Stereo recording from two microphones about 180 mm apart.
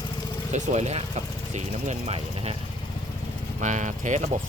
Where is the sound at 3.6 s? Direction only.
40° right (ahead or behind).